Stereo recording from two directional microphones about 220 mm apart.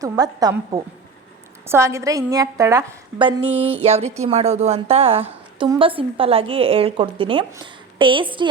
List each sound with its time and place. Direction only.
0.0 s a woman's voice: 15° right (ahead or behind)
3.5 s a woman's voice: 10° right (ahead or behind)
3.8 s a woman's voice: 30° right (ahead or behind)